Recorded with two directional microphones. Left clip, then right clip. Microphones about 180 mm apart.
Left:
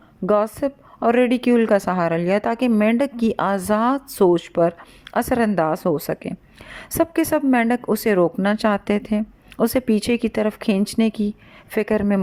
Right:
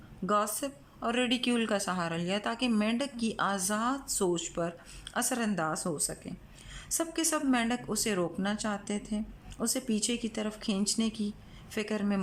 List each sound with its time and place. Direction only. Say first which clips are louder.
0.3 s a woman's voice: left 11 dB; 40° left (ahead or behind)